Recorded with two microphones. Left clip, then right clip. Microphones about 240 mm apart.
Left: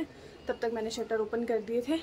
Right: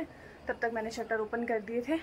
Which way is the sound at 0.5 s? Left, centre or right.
Centre.